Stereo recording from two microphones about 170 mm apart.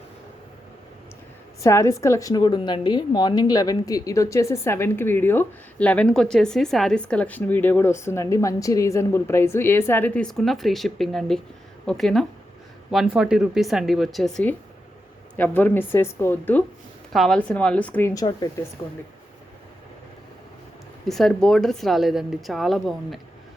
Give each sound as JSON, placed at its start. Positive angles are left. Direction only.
{"t": 1.6, "sound": "a woman's voice", "side_deg": 15}
{"t": 18.1, "sound": "speech", "side_deg": 25}
{"t": 21.1, "sound": "a woman's voice", "side_deg": 0}